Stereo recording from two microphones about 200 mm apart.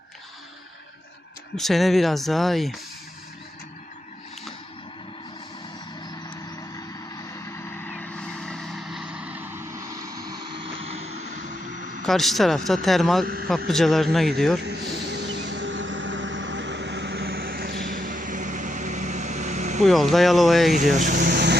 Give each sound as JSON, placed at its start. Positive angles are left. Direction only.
{"t": 1.5, "sound": "speech", "side_deg": 0}
{"t": 7.9, "sound": "vehicle", "side_deg": 5}
{"t": 10.6, "sound": "vehicle", "side_deg": -30}
{"t": 12.0, "sound": "speech", "side_deg": 0}
{"t": 13.2, "sound": "speech", "side_deg": -50}
{"t": 13.7, "sound": "speech", "side_deg": 0}
{"t": 14.6, "sound": "vehicle", "side_deg": -55}
{"t": 19.8, "sound": "speech", "side_deg": 0}
{"t": 20.9, "sound": "speech", "side_deg": -40}